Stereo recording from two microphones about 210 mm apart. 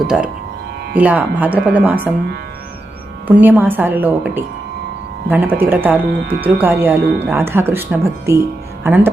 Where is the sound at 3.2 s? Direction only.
5° right (ahead or behind).